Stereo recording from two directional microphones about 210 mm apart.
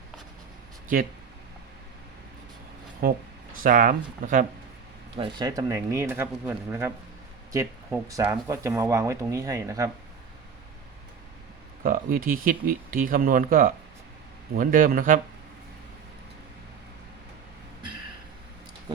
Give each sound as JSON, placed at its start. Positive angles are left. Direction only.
{"t": 3.0, "sound": "speech", "side_deg": -45}
{"t": 5.1, "sound": "speech", "side_deg": -20}
{"t": 8.0, "sound": "speech", "side_deg": -15}
{"t": 11.8, "sound": "speech", "side_deg": -40}